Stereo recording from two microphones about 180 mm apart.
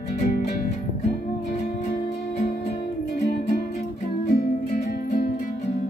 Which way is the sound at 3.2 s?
65° left (ahead or behind).